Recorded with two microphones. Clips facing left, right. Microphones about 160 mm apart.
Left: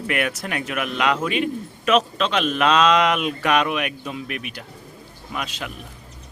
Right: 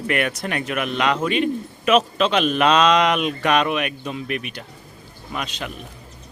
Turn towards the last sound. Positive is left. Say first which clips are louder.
# right 1 dB
turn(degrees=5)  # may be behind; listen again after turning